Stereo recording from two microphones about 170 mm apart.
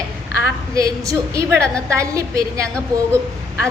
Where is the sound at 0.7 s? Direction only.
20° right (ahead or behind).